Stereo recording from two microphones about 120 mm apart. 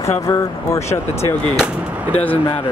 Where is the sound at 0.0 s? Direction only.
25° left (ahead or behind).